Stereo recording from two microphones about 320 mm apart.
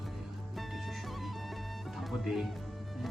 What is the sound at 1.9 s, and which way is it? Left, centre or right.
Speech, centre.